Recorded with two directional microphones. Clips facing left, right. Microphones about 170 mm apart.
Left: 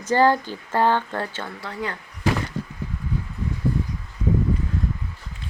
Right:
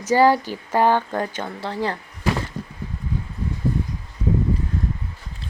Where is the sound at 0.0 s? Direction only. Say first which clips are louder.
Right 2 dB; 10° right (ahead or behind); by 2.0 s 30° right (ahead or behind).